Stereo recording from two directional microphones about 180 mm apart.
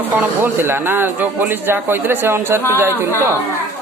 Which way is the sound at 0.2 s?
10° right (ahead or behind).